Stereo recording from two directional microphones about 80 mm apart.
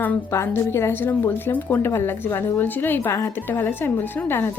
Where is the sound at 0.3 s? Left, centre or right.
Left.